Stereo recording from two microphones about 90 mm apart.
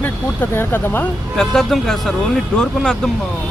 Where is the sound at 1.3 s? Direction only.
5° left (ahead or behind).